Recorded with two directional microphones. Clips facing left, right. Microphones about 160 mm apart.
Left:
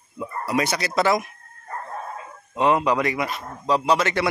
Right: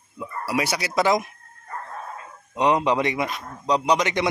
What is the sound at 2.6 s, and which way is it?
Speech, 20° right (ahead or behind).